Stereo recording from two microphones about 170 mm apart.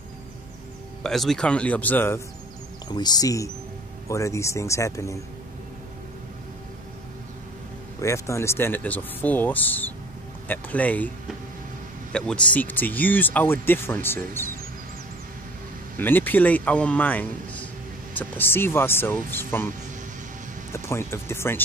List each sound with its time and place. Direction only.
1.0 s speech: centre (ahead or behind)
2.9 s speech: 25° left (ahead or behind)
8.0 s speech: 15° left (ahead or behind)
16.0 s speech: 10° left (ahead or behind)
20.7 s speech: 15° left (ahead or behind)